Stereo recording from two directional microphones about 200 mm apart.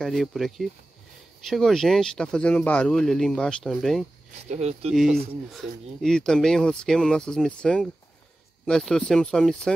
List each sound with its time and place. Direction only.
0.0 s speech: centre (ahead or behind)
4.5 s speech: 35° right (ahead or behind)
5.5 s speech: centre (ahead or behind)